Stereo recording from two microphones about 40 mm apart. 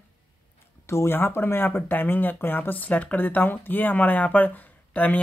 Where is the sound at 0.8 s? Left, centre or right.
Left.